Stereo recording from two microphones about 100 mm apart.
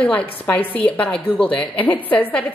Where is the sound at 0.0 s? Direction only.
15° left (ahead or behind).